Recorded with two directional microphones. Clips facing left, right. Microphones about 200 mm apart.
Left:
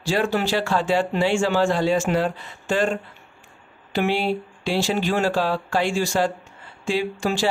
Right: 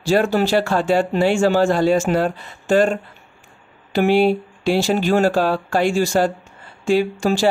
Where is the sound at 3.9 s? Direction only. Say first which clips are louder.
Right 7 dB; 45° right (ahead or behind).